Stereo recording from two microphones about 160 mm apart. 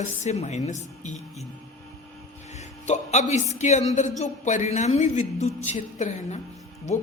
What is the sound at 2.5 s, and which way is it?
Speech, 45° left (ahead or behind).